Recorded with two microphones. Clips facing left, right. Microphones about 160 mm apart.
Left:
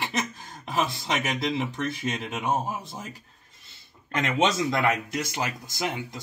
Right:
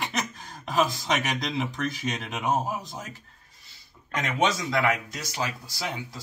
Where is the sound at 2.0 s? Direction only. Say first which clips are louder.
Even; centre (ahead or behind).